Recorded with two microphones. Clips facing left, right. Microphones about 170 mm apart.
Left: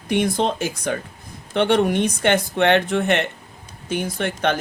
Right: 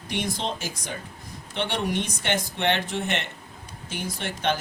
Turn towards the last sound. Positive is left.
turn(degrees=60)  # may be behind; listen again after turning